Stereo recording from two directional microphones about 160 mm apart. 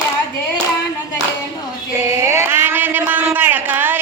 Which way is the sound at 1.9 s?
15° right (ahead or behind).